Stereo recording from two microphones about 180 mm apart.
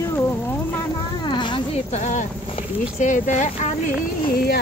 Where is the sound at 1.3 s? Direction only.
25° left (ahead or behind).